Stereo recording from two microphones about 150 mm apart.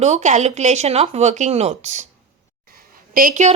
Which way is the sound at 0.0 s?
50° right (ahead or behind).